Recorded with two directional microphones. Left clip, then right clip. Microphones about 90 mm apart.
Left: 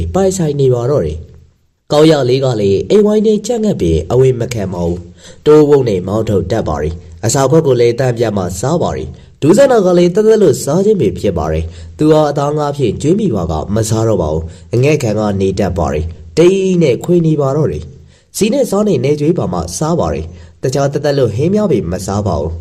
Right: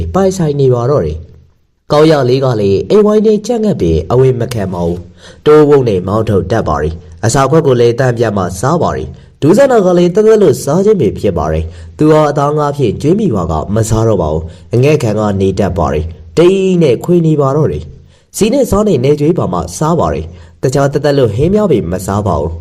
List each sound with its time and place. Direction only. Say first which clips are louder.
0.1 s a man's voice: right 2 dB; 15° right (ahead or behind); by 22.4 s 40° right (ahead or behind)